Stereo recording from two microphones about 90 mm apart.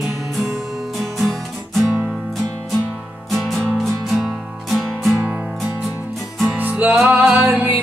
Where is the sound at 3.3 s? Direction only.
5° left (ahead or behind).